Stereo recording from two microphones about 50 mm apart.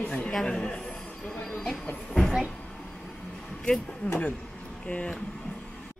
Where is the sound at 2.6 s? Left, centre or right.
Centre.